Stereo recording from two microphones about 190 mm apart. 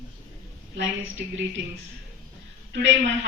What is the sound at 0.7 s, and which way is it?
Speech, 75° right (ahead or behind).